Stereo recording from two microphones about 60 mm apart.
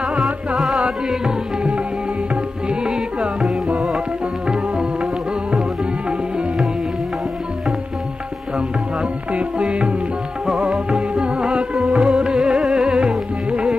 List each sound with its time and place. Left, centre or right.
0.6 s music: centre
9.3 s music: centre